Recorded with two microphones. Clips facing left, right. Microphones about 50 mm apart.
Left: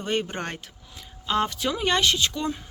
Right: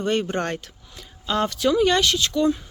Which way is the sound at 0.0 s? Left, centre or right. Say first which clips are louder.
Right 5 dB; centre.